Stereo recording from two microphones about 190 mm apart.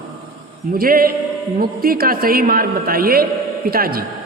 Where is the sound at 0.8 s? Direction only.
50° right (ahead or behind).